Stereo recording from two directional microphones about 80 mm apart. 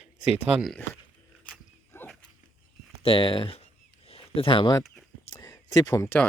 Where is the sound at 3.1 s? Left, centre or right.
Left.